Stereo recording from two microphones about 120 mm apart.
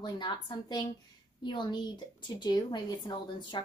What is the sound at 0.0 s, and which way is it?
A child's voice, 40° left (ahead or behind).